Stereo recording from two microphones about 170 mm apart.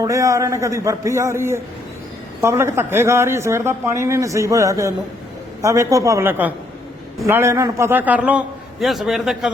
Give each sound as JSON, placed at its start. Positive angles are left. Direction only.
{"t": 0.0, "sound": "speech", "side_deg": -20}